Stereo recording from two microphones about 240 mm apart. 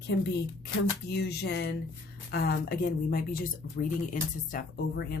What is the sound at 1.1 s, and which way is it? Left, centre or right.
Speech, left.